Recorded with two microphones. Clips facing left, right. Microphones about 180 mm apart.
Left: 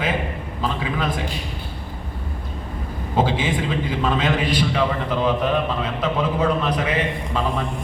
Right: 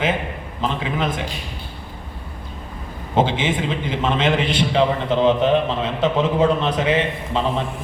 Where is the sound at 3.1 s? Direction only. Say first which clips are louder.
Right 2 dB; 25° right (ahead or behind).